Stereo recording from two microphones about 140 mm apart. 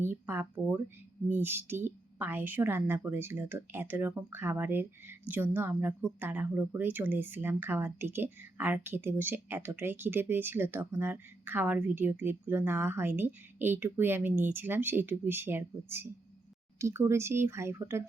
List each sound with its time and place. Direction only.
0.0 s speech: 15° right (ahead or behind)